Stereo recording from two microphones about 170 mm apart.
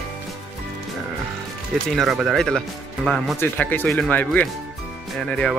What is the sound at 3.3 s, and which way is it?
Speech, 10° left (ahead or behind).